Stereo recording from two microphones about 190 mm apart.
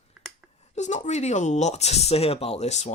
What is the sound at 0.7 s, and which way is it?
Speech, 35° left (ahead or behind).